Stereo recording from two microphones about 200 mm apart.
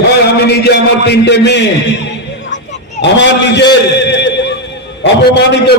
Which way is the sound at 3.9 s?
60° left (ahead or behind).